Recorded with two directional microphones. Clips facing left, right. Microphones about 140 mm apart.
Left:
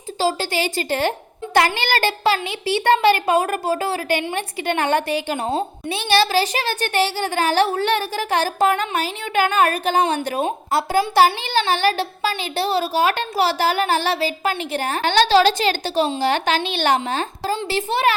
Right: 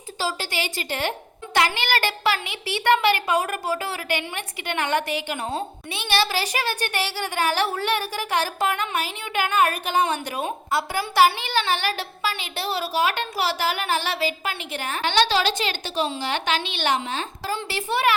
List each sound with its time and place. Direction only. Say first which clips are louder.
0.2 s a woman's voice: left 7 dB; 35° left (ahead or behind)
17.5 s a child's voice: left 3 dB; 30° left (ahead or behind)